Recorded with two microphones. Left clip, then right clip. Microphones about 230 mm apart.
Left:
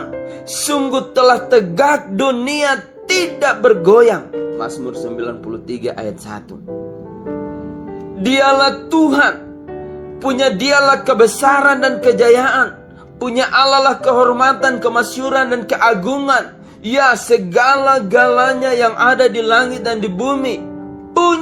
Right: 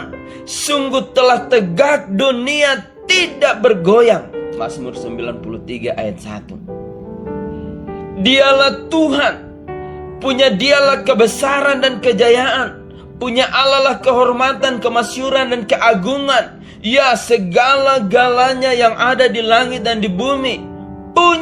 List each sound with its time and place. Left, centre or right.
0.5 s speech: left
8.2 s speech: left